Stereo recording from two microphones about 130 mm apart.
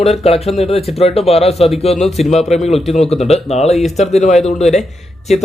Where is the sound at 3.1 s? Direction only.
Centre (ahead or behind).